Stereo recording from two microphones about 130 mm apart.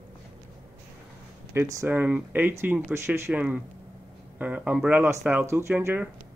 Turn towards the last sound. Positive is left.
turn(degrees=-15)  # may be behind; listen again after turning